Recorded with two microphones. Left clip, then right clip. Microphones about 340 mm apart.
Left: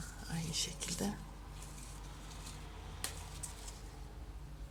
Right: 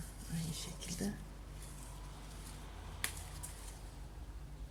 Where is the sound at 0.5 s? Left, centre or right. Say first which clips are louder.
Left 7 dB; centre.